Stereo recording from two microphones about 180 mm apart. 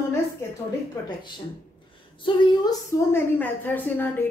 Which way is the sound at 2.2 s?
15° left (ahead or behind).